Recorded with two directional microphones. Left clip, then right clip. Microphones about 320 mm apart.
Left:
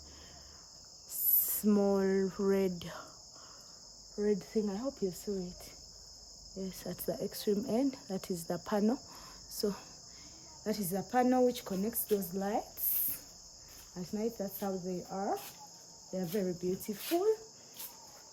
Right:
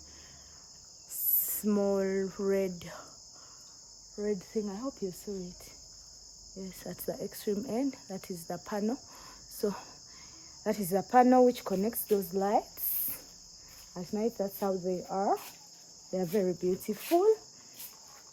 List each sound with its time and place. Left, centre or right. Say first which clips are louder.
1.5 s cricket: right 1 dB; centre
4.2 s cricket: left 1 dB; centre
6.6 s cricket: left 1 dB; centre
10.6 s speech: right 6 dB; centre
13.9 s speech: right 4 dB; centre